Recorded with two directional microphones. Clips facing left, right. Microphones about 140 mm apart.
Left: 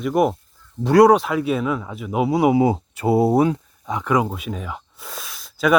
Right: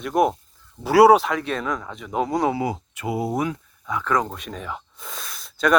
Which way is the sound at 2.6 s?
25° left (ahead or behind).